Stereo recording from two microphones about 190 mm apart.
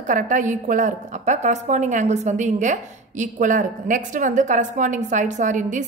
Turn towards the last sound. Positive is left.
turn(degrees=-40)  # may be behind; listen again after turning